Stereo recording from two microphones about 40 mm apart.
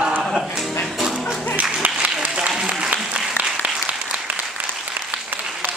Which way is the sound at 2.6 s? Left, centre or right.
Right.